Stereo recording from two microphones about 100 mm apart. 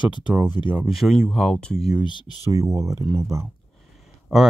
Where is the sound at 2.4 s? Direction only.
30° right (ahead or behind).